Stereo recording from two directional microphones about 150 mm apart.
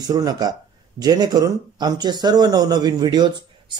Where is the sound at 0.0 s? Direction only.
25° right (ahead or behind).